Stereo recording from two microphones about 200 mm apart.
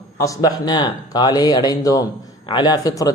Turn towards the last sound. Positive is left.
turn(degrees=20)  # may be behind; listen again after turning